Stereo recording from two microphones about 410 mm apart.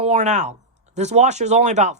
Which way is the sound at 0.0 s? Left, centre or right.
Centre.